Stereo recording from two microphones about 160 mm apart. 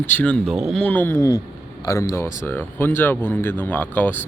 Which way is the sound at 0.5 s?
Centre (ahead or behind).